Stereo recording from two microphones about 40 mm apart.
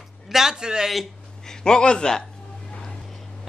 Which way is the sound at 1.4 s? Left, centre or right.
Centre.